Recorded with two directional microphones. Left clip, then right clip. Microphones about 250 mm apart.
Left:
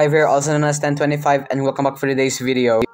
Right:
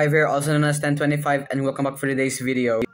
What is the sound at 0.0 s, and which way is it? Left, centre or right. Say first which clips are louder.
A man's voice: left 5 dB; centre.